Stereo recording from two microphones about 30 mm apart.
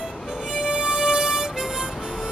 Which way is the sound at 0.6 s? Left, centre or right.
Right.